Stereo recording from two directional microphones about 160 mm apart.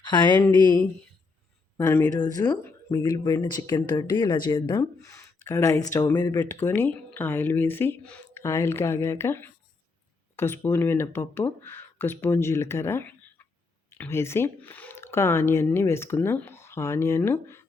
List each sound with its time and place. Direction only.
0.0 s speech: 30° left (ahead or behind)
1.8 s speech: 15° left (ahead or behind)
2.1 s speech: 25° left (ahead or behind)
6.5 s speech: 10° left (ahead or behind)